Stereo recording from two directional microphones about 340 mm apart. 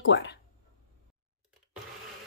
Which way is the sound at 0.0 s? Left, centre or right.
Left.